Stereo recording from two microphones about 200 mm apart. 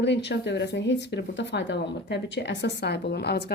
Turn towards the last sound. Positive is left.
turn(degrees=55)  # may be behind; listen again after turning